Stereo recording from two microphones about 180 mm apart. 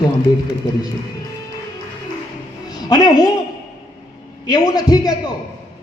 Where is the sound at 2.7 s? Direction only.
20° left (ahead or behind).